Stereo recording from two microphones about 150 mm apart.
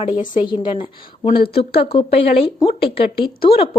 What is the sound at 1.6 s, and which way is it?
A woman's voice, 40° left (ahead or behind).